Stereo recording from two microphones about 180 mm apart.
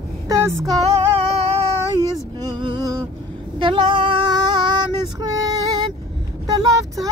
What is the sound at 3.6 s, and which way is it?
Female singing, 25° right (ahead or behind).